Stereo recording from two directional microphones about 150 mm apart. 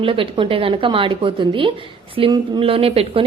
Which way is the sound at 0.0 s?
35° right (ahead or behind).